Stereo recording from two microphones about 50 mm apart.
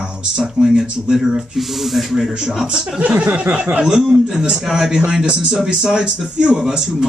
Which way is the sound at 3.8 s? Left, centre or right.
Centre.